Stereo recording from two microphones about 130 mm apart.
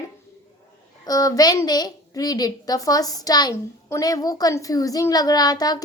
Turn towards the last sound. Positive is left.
turn(degrees=30)  # may be behind; listen again after turning